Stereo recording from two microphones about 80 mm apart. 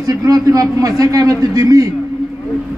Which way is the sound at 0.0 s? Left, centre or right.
Right.